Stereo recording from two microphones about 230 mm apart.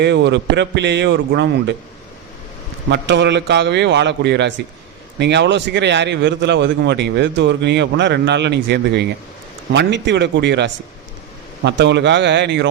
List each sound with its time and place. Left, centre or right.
0.0 s a man's voice: right
2.9 s a man's voice: right